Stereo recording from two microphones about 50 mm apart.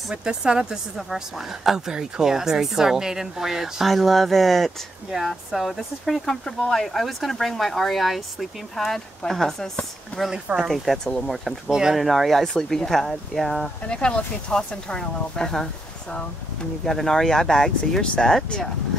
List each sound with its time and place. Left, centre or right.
0.1 s speech: centre
10.3 s speech: centre
10.7 s speech: centre
11.7 s speech: centre
12.0 s speech: centre
13.8 s speech: left